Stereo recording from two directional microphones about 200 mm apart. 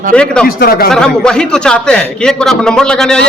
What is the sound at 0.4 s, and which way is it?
Speech, 50° left (ahead or behind).